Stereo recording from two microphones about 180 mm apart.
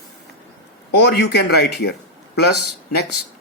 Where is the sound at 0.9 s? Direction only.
65° left (ahead or behind).